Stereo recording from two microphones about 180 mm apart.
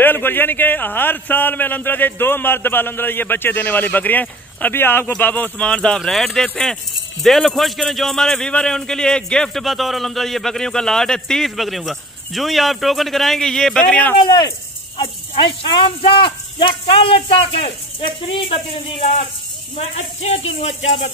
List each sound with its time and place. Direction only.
0.0 s a man's voice: 10° left (ahead or behind)
14.1 s speech: 25° left (ahead or behind)
20.8 s speech: 90° left